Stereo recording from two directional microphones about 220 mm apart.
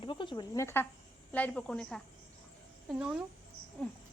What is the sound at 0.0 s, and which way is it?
Speech, 20° left (ahead or behind).